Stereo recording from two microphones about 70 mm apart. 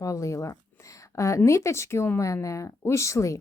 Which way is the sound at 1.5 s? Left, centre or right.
Left.